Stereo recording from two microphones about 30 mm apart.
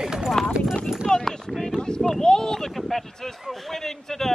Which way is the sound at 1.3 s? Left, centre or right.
Centre.